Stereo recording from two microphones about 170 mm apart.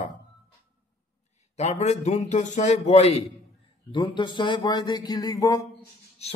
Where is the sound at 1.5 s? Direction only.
40° left (ahead or behind).